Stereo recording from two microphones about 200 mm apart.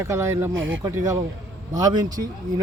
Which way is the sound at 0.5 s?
75° right (ahead or behind).